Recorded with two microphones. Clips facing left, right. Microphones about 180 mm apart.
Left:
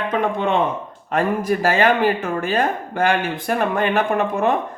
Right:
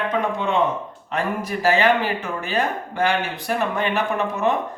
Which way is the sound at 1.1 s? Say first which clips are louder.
Left 6 dB; 50° left (ahead or behind).